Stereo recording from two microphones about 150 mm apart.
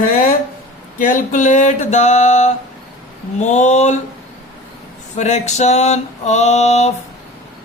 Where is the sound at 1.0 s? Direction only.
60° left (ahead or behind).